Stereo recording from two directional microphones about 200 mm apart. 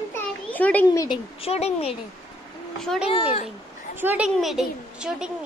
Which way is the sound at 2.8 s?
Centre (ahead or behind).